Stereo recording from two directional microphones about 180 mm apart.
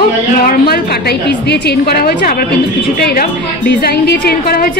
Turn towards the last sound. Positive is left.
turn(degrees=55)  # may be behind; listen again after turning